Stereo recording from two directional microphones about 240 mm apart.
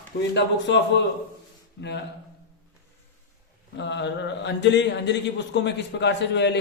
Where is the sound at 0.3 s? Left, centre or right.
Left.